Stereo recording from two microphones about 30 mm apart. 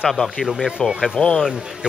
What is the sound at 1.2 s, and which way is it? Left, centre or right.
Speech, left.